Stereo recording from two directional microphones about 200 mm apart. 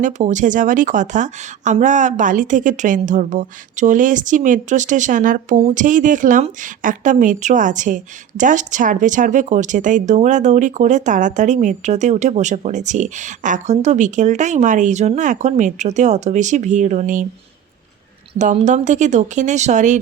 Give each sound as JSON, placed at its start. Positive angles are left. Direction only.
{"t": 0.0, "sound": "speech", "side_deg": -40}
{"t": 18.3, "sound": "speech", "side_deg": -35}